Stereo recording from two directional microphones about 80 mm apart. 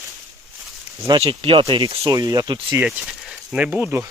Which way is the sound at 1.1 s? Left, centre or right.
Right.